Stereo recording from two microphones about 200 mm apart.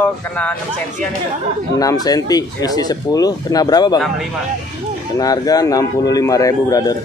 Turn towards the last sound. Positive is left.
turn(degrees=20)  # may be behind; listen again after turning